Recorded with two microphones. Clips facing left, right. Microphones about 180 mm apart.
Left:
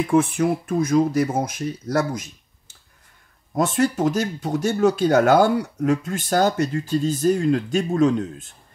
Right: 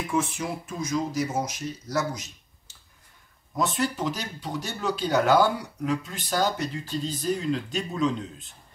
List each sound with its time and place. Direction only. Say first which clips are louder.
0.0 s speech: left 9 dB; 55° left (ahead or behind)